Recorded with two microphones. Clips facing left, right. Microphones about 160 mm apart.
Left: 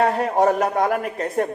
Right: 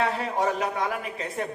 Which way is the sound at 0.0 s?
50° left (ahead or behind).